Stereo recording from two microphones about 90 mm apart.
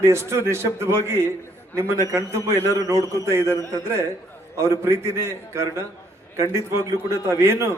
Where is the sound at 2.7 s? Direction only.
35° right (ahead or behind).